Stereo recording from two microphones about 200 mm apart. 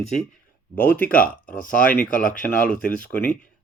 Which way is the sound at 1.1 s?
45° left (ahead or behind).